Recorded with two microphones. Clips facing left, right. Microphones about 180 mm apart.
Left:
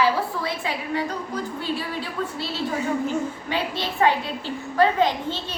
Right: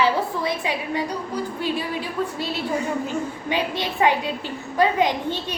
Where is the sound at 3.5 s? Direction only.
15° right (ahead or behind).